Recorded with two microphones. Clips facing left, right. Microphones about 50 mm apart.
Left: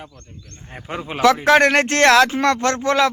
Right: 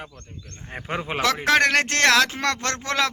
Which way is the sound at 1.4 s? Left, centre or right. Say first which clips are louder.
Left 5 dB; centre.